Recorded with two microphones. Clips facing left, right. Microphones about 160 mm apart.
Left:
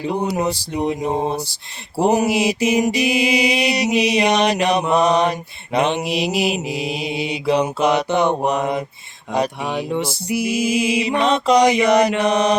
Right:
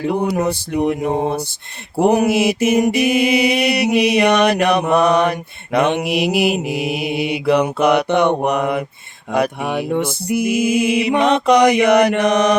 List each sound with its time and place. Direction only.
0.0 s mantra: 60° right (ahead or behind)